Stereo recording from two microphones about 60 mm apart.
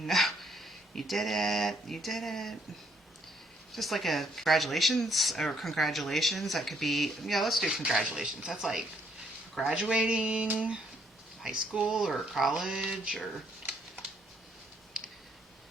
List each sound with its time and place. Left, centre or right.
0.0 s speech: centre
3.7 s speech: centre
7.7 s speech: centre
11.9 s speech: centre
13.1 s a sound: centre